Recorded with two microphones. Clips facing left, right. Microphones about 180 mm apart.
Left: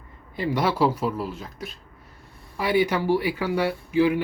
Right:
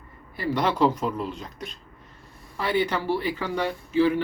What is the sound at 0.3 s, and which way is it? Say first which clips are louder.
Speech: left 1 dB; 20° left (ahead or behind).